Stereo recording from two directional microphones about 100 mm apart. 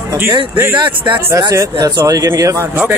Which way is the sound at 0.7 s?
55° right (ahead or behind).